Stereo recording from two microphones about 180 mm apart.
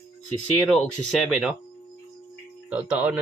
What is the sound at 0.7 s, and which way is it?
Speech, centre (ahead or behind).